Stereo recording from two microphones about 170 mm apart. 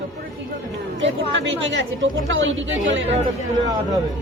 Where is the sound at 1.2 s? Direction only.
90° right.